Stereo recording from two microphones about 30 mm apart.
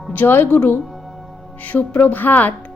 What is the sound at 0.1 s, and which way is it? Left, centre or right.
Speech, left.